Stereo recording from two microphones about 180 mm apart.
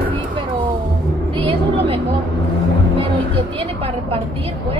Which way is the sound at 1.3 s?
30° right (ahead or behind).